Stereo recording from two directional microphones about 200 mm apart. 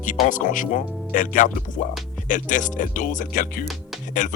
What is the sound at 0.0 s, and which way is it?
Speech, 40° left (ahead or behind).